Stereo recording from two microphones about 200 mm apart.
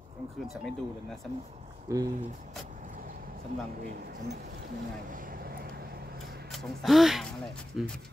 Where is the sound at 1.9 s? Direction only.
15° right (ahead or behind).